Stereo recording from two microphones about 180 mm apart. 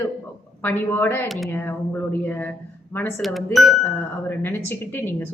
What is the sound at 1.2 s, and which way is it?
Speech, centre (ahead or behind).